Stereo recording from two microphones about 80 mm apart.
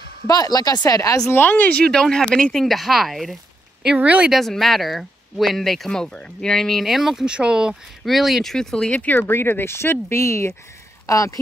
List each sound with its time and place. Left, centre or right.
0.3 s speech: left
1.3 s speech: left
1.9 s speech: centre
3.8 s speech: centre
4.3 s speech: centre
8.9 s speech: left